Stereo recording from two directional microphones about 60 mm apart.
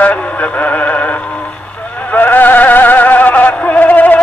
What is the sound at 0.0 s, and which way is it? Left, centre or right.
Music, left.